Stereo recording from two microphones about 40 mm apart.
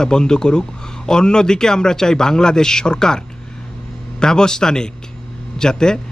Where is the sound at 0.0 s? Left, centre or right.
Centre.